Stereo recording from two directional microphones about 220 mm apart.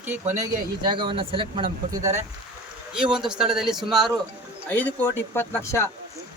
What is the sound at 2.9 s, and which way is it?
A man's voice, 5° right (ahead or behind).